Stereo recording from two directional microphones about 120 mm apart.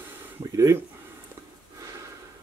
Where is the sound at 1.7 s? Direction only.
30° right (ahead or behind).